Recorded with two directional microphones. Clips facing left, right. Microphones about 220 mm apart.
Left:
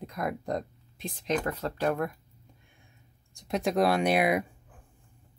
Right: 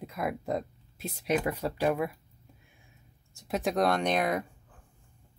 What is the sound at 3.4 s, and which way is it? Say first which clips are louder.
Speech: left 2 dB; centre (ahead or behind).